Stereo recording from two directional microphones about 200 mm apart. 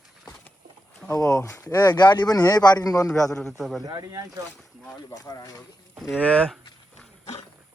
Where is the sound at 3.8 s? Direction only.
20° right (ahead or behind).